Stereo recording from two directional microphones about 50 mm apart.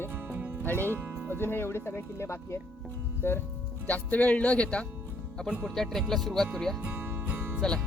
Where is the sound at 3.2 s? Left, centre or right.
Left.